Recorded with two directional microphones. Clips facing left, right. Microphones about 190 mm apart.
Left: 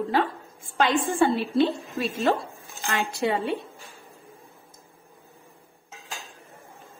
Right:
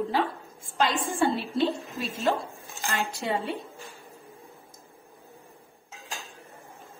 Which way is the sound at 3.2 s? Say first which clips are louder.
Left 5 dB; 65° left (ahead or behind).